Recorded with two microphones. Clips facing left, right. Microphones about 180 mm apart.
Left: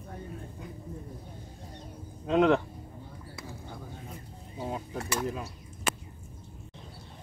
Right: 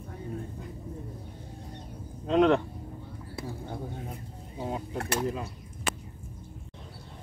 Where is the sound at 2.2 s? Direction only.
5° left (ahead or behind).